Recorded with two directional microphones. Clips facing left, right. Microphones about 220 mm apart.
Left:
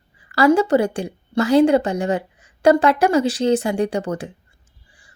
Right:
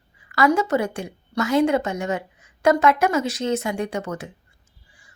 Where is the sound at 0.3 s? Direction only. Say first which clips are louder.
Left 5 dB; 30° left (ahead or behind).